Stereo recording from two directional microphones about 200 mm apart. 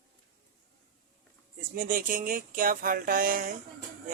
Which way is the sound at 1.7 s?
45° right (ahead or behind).